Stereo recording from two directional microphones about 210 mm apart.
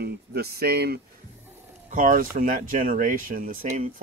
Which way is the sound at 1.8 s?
40° right (ahead or behind).